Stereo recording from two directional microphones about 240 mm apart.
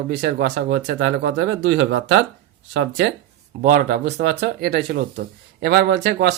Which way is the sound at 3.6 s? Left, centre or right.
Right.